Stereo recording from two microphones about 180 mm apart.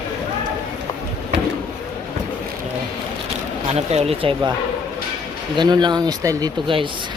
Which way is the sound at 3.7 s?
35° right (ahead or behind).